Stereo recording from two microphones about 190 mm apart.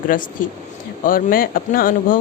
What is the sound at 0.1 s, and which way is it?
Speech, 45° left (ahead or behind).